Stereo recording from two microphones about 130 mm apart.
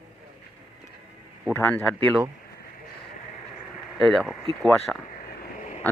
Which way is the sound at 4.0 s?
Centre (ahead or behind).